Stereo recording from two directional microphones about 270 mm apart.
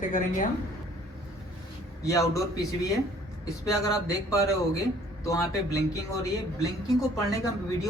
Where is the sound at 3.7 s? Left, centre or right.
Centre.